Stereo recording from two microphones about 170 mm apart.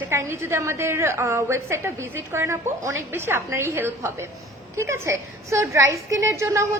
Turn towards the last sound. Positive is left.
turn(degrees=-15)  # may be behind; listen again after turning